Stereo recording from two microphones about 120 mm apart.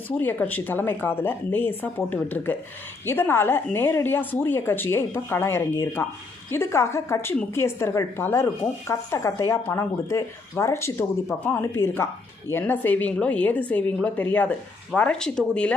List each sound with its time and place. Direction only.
0.2 s speech: 15° left (ahead or behind)